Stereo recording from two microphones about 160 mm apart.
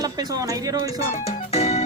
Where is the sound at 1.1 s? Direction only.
45° left (ahead or behind).